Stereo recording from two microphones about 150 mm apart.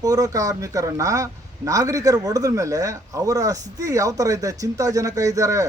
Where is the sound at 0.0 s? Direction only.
25° right (ahead or behind).